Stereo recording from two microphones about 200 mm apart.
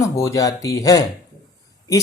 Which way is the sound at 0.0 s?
15° left (ahead or behind).